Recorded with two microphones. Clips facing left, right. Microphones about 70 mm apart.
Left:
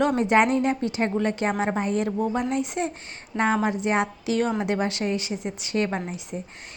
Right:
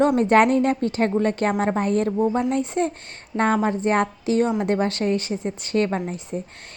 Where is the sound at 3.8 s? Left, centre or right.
Right.